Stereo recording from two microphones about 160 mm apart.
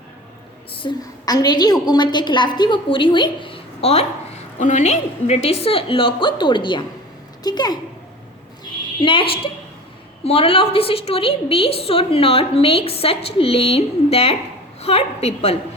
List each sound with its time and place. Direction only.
0.8 s a woman's voice: 25° left (ahead or behind)
9.0 s a woman's voice: 30° left (ahead or behind)
10.2 s a woman's voice: 35° left (ahead or behind)